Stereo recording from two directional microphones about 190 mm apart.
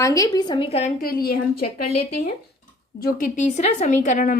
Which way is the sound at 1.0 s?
50° left (ahead or behind).